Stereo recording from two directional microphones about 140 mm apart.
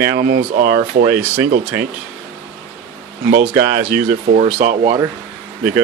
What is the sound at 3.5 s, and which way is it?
Speech, 90° right.